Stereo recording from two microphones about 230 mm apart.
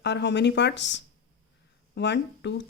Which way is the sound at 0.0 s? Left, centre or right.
Left.